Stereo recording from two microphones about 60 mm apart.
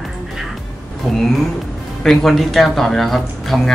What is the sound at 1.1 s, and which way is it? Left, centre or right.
Speech, centre.